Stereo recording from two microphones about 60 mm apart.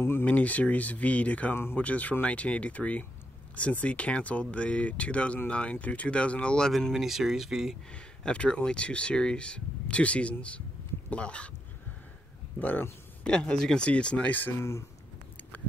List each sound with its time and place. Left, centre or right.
0.0 s a sound: left
0.3 s speech: left
1.5 s speech: left
1.8 s speech: left
6.7 s speech: centre
7.9 s speech: centre
12.5 s speech: left
13.2 s speech: centre